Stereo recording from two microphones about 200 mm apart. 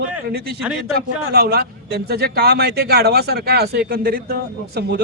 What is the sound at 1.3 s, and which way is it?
Speech, 50° right (ahead or behind).